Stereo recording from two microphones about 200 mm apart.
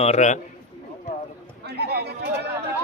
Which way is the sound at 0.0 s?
35° left (ahead or behind).